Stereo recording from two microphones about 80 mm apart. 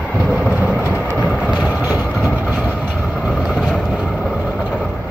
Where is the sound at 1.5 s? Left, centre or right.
Centre.